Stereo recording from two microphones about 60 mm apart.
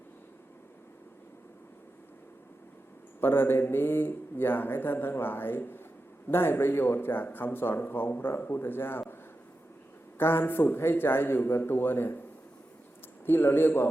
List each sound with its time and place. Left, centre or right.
3.2 s speech: left
10.2 s speech: left
13.2 s speech: left